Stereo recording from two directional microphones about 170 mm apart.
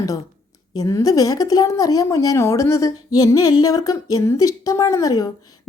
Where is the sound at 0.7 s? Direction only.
20° left (ahead or behind).